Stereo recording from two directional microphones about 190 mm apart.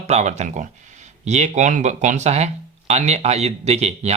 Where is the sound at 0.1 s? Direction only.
35° right (ahead or behind).